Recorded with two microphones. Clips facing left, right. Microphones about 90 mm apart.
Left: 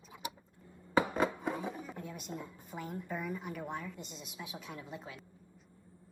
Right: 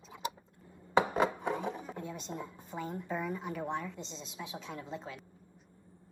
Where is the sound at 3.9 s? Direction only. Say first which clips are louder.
Right 3 dB; 10° left (ahead or behind).